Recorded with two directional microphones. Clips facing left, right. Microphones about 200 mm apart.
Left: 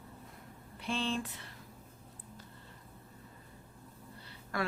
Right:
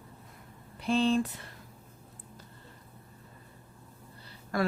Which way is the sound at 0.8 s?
40° right (ahead or behind).